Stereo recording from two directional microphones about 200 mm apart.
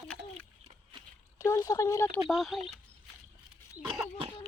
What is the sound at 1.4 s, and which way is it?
Speech, 15° left (ahead or behind).